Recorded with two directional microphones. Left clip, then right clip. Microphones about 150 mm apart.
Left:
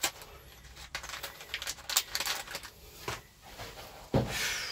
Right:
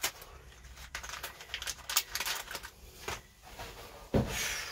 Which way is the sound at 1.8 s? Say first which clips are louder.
Left 2 dB; 55° left (ahead or behind).